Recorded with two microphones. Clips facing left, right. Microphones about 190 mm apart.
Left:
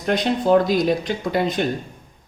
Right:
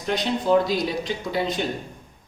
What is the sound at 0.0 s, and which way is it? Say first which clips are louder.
Speech: left 4 dB; 55° left (ahead or behind).